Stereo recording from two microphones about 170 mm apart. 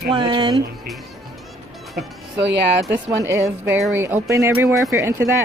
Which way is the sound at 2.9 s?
15° right (ahead or behind).